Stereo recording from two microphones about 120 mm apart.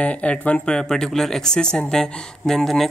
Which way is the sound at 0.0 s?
10° left (ahead or behind).